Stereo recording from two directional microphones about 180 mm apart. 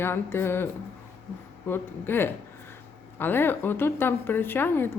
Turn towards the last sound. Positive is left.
turn(degrees=10)  # may be behind; listen again after turning